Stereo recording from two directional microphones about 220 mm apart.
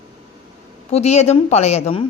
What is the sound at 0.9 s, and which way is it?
Speech, 30° left (ahead or behind).